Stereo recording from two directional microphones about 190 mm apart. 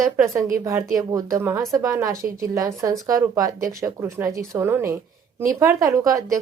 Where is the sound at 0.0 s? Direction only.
15° right (ahead or behind).